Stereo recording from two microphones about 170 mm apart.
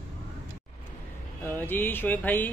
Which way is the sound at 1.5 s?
10° left (ahead or behind).